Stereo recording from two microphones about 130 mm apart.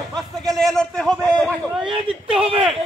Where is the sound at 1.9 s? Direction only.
45° right (ahead or behind).